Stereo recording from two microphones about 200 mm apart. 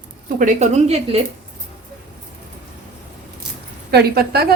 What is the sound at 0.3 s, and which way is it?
Speech, 35° right (ahead or behind).